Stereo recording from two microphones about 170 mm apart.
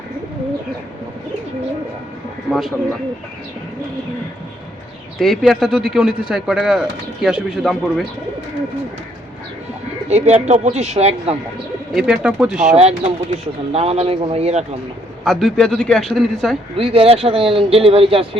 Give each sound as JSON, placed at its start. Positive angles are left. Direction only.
{"t": 2.5, "sound": "speech", "side_deg": 0}
{"t": 5.2, "sound": "speech", "side_deg": 0}
{"t": 10.1, "sound": "speech", "side_deg": -40}
{"t": 11.9, "sound": "speech", "side_deg": -5}
{"t": 12.7, "sound": "speech", "side_deg": -35}
{"t": 15.2, "sound": "speech", "side_deg": 0}
{"t": 16.7, "sound": "speech", "side_deg": -35}